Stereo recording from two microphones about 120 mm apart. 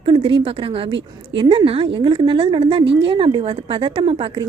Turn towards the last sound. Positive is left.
turn(degrees=-55)  # may be behind; listen again after turning